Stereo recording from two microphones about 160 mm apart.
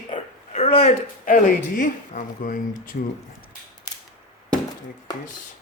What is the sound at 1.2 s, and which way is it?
Speech, 55° left (ahead or behind).